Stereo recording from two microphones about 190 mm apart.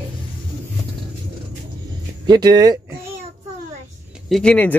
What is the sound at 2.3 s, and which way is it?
Speech, 20° right (ahead or behind).